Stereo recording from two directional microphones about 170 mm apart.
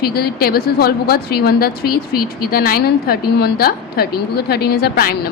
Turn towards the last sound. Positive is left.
turn(degrees=65)  # may be behind; listen again after turning